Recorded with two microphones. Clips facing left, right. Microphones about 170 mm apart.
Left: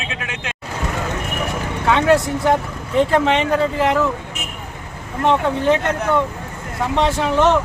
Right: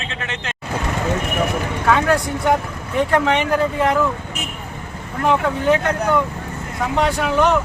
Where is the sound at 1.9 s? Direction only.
25° left (ahead or behind).